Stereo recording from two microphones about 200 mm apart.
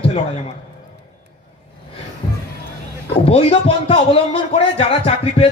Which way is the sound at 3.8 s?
30° left (ahead or behind).